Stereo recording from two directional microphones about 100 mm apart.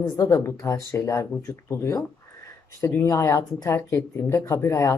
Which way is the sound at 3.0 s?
30° left (ahead or behind).